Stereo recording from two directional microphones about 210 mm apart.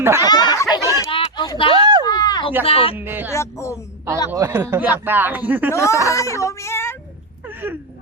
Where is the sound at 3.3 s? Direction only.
15° left (ahead or behind).